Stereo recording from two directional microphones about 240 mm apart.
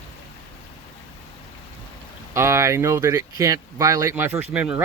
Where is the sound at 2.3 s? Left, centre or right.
Centre.